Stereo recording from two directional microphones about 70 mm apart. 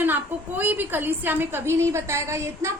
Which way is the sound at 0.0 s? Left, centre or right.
Right.